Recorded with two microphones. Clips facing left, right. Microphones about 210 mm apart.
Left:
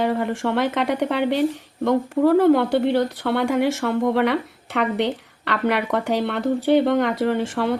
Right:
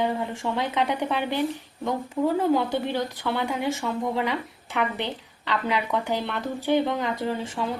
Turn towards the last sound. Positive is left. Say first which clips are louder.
# left 7 dB
turn(degrees=70)  # may be behind; listen again after turning